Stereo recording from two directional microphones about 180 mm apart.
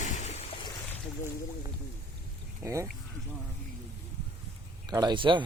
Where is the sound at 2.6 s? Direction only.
15° right (ahead or behind).